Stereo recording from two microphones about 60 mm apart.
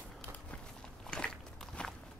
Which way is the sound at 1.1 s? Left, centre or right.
Centre.